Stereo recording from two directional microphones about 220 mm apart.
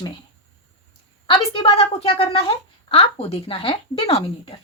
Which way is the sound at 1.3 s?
25° left (ahead or behind).